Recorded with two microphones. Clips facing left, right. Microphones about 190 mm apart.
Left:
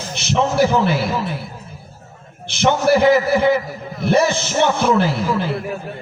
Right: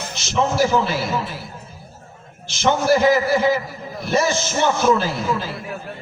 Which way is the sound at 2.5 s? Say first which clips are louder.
Left 2 dB; 60° left (ahead or behind).